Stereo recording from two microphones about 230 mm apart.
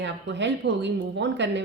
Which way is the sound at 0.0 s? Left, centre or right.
Right.